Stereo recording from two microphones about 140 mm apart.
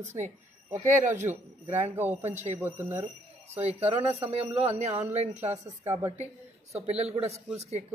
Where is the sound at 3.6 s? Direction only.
50° right (ahead or behind).